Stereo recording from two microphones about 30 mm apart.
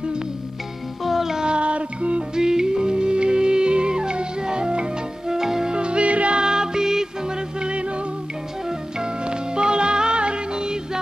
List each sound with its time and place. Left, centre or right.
1.0 s music: centre
1.4 s music: right
2.3 s music: right
5.3 s music: centre
5.7 s music: right
6.3 s music: right
7.7 s music: right
8.6 s music: right